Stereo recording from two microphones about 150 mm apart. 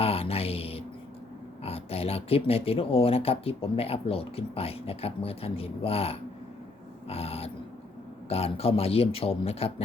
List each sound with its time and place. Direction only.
0.0 s mantra: 40° left (ahead or behind)
1.6 s speech: 40° left (ahead or behind)